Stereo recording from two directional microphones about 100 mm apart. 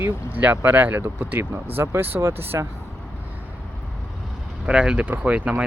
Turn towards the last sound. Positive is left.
turn(degrees=-15)  # may be behind; listen again after turning